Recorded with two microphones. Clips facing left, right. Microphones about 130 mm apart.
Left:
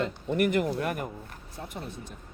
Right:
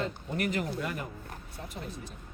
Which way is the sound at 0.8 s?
55° left (ahead or behind).